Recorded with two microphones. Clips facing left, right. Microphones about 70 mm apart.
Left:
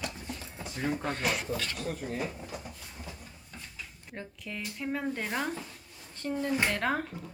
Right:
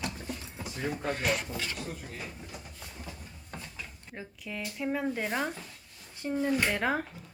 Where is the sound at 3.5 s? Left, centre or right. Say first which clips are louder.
Right 5 dB; right.